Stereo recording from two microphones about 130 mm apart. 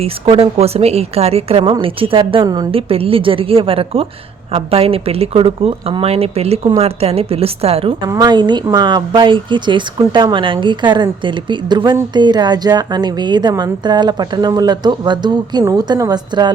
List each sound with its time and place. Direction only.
0.0 s a woman's voice: 50° right (ahead or behind)
8.0 s a woman's voice: 30° right (ahead or behind)